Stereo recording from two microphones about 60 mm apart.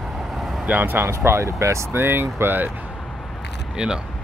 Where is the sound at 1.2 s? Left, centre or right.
Right.